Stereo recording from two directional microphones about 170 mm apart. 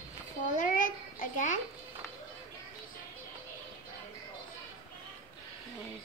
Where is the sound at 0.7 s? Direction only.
50° left (ahead or behind).